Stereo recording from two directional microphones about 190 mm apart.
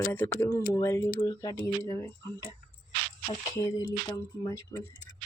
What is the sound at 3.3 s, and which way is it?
Speech, 20° left (ahead or behind).